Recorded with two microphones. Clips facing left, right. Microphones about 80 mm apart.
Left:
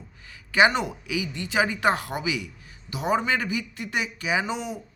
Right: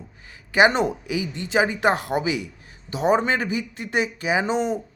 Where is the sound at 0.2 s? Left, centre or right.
Right.